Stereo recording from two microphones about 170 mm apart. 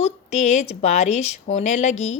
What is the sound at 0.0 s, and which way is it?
Speech, 40° left (ahead or behind).